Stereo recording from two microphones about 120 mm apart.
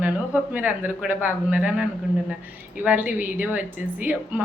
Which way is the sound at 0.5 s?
15° right (ahead or behind).